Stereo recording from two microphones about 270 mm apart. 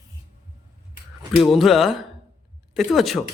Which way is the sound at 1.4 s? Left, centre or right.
Centre.